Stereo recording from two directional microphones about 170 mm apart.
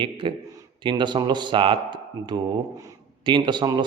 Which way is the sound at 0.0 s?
30° right (ahead or behind).